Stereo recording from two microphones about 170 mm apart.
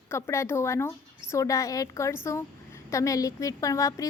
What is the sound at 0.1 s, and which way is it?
A woman's voice, 15° left (ahead or behind).